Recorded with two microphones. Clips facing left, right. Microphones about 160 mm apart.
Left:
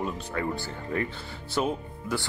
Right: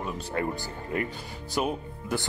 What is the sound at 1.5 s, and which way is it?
Speech, 15° right (ahead or behind).